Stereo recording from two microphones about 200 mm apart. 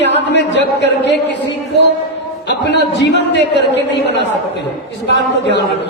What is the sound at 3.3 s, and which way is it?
Speech, 60° left (ahead or behind).